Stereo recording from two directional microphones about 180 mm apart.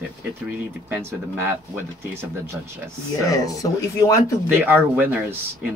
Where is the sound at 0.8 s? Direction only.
10° right (ahead or behind).